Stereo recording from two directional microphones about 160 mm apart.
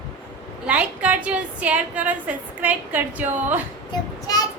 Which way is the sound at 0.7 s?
10° right (ahead or behind).